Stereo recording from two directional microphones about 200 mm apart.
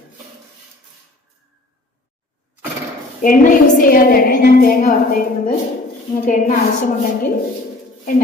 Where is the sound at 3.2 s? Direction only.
45° left (ahead or behind).